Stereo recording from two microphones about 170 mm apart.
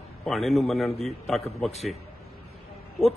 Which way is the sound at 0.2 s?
Centre (ahead or behind).